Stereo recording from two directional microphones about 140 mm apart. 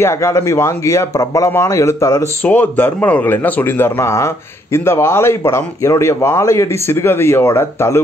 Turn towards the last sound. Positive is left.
turn(degrees=15)  # may be behind; listen again after turning